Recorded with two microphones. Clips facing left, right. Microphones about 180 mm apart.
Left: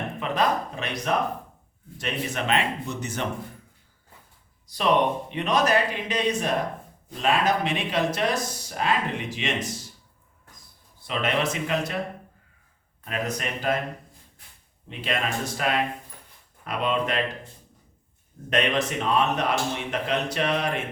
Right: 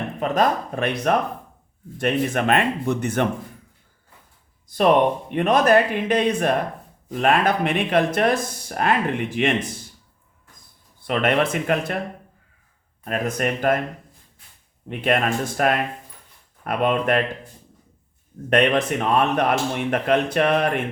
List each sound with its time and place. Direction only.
0.2 s speech: 50° right (ahead or behind)
4.7 s speech: 50° right (ahead or behind)
11.0 s speech: 55° right (ahead or behind)
13.1 s speech: 50° right (ahead or behind)
14.8 s speech: 55° right (ahead or behind)
18.5 s speech: 55° right (ahead or behind)